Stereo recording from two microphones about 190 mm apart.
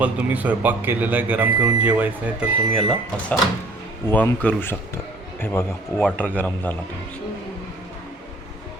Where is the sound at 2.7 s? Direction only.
Centre (ahead or behind).